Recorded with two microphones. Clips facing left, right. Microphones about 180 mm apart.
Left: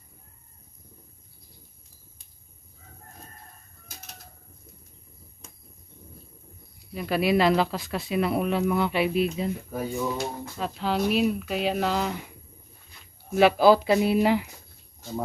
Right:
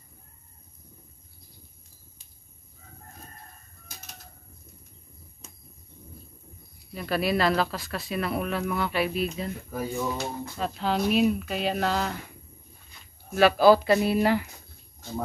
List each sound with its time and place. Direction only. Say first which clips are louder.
6.9 s speech: left 3 dB; 10° left (ahead or behind)
10.1 s speech: left 1 dB; 10° left (ahead or behind)
13.3 s speech: even; 15° left (ahead or behind)